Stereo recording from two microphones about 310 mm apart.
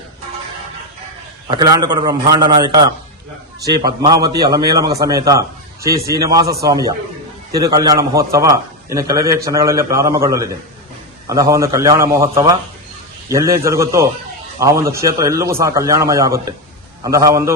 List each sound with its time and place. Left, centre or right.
1.5 s a man's voice: centre